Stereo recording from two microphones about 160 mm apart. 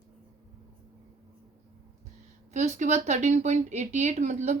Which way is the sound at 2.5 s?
45° right (ahead or behind).